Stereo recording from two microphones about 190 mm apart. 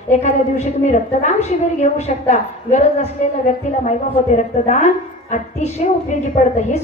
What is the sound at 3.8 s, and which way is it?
A woman's voice, 40° left (ahead or behind).